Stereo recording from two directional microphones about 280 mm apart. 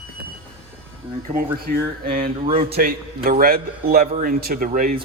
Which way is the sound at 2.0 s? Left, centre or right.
Right.